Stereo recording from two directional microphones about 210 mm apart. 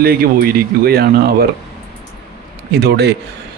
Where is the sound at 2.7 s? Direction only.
50° right (ahead or behind).